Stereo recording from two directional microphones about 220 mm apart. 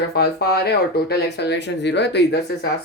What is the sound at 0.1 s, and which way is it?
Speech, 45° left (ahead or behind).